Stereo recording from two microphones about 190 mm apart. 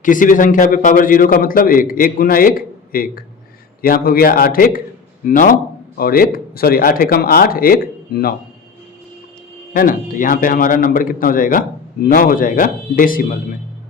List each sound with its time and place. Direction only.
0.0 s a man's voice: 45° left (ahead or behind)
9.7 s a man's voice: 45° left (ahead or behind)